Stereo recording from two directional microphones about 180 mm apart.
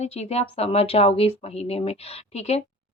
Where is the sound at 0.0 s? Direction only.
35° left (ahead or behind).